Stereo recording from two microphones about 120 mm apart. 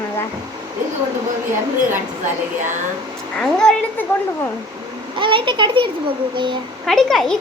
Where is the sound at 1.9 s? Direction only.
90° right.